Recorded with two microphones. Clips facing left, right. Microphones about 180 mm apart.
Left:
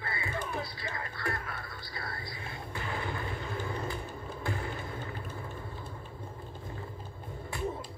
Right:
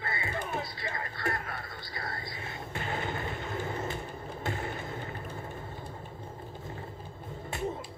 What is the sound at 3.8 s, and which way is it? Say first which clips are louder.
Vehicle: right 1 dB; 25° right (ahead or behind).